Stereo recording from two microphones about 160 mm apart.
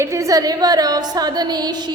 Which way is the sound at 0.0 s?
20° right (ahead or behind).